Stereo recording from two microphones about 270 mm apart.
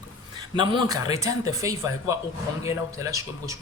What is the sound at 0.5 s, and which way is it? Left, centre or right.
Speech, centre.